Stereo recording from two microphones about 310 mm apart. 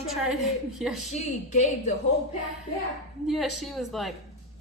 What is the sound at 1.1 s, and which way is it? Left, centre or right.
Speech, left.